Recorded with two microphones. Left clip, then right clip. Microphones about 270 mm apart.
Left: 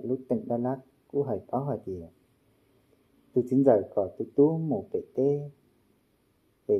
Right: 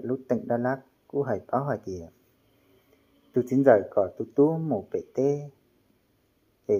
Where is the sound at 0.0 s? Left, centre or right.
Right.